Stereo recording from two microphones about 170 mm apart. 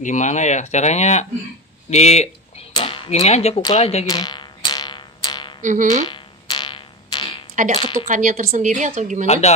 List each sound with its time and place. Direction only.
0.0 s speech: 45° left (ahead or behind)
2.7 s a sound: 30° left (ahead or behind)
3.6 s speech: 35° left (ahead or behind)
4.1 s a sound: 25° left (ahead or behind)
5.6 s a woman's voice: 50° right (ahead or behind)
6.0 s a sound: 25° left (ahead or behind)
7.7 s speech: 25° left (ahead or behind)
8.1 s a woman's voice: 50° right (ahead or behind)
9.2 s speech: 40° left (ahead or behind)